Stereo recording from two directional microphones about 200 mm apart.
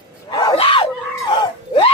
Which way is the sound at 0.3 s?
20° left (ahead or behind).